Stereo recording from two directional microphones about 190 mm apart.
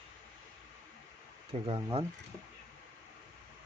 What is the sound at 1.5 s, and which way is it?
Speech, 30° right (ahead or behind).